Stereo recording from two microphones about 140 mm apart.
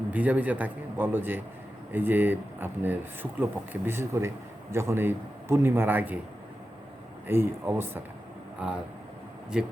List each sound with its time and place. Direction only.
0.1 s speech: 10° right (ahead or behind)
7.3 s speech: 15° right (ahead or behind)